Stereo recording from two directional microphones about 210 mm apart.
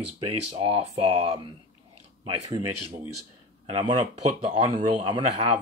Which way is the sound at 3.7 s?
30° right (ahead or behind).